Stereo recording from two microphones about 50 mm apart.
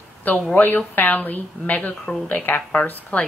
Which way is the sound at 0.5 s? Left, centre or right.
Left.